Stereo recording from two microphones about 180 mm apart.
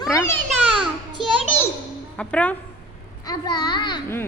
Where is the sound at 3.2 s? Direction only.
20° left (ahead or behind).